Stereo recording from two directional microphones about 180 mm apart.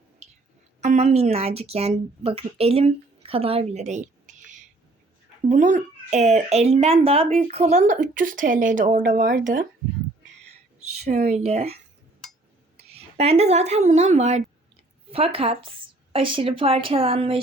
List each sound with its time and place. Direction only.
0.2 s music: 35° right (ahead or behind)
0.8 s speech: 40° right (ahead or behind)
10.9 s a woman's voice: 35° right (ahead or behind)
12.9 s a woman's voice: 35° right (ahead or behind)